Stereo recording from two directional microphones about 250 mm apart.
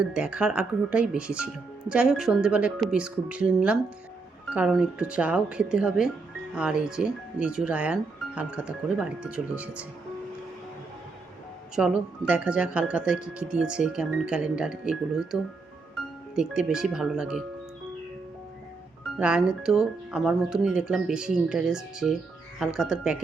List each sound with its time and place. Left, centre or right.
0.0 s speech: centre
11.7 s speech: centre
19.2 s speech: centre